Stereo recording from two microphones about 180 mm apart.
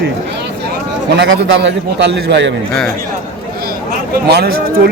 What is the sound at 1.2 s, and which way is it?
A man's voice, 75° right (ahead or behind).